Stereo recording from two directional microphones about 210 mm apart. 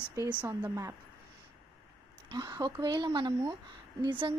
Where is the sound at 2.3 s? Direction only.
20° right (ahead or behind).